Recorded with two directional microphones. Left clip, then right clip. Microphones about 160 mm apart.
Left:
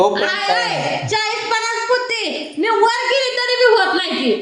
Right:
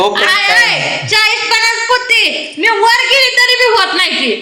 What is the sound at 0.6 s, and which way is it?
A woman's voice, 25° left (ahead or behind).